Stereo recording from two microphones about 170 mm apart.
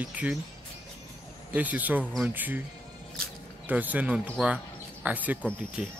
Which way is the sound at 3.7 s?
10° right (ahead or behind).